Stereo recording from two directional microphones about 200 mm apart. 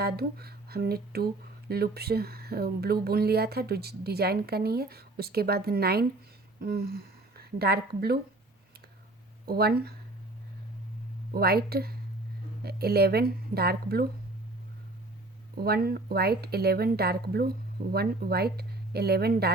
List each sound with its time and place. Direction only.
0.0 s a woman's voice: 50° right (ahead or behind)
9.5 s speech: 50° right (ahead or behind)
11.3 s speech: 50° right (ahead or behind)
15.5 s speech: 50° right (ahead or behind)